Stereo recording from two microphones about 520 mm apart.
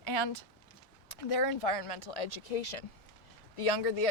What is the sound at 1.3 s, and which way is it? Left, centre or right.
Speech, left.